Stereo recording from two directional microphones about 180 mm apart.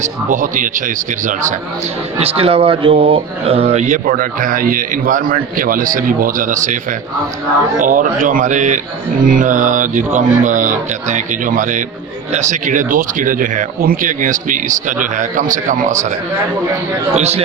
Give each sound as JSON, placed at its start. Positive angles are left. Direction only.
{"t": 0.0, "sound": "speech", "side_deg": -45}
{"t": 2.1, "sound": "speech", "side_deg": -35}
{"t": 7.8, "sound": "speech", "side_deg": -45}
{"t": 17.2, "sound": "a man's voice", "side_deg": -35}